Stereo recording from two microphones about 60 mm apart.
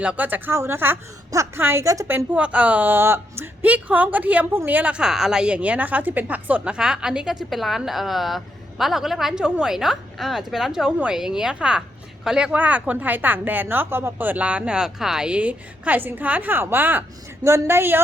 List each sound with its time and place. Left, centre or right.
0.0 s a woman's voice: right
0.5 s a woman's voice: right
1.8 s a woman's voice: right
2.3 s a woman's voice: right
2.9 s a woman's voice: right
3.6 s a woman's voice: right
4.9 s a woman's voice: centre; by 6.7 s right
6.7 s speech: centre
7.5 s a woman's voice: centre
9.3 s speech: centre
9.7 s a woman's voice: centre
12.5 s a woman's voice: right
14.4 s speech: centre
15.3 s a woman's voice: right